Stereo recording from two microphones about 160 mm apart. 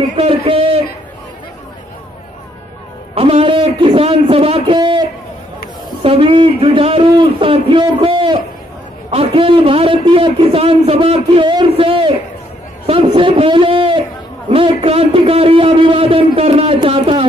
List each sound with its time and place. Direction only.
0.2 s a sound: 35° right (ahead or behind)
3.2 s a man's voice: 35° right (ahead or behind)
6.0 s a man's voice: 35° right (ahead or behind)